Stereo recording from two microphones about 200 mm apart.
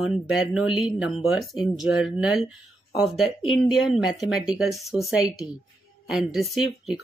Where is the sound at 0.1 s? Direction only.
Centre (ahead or behind).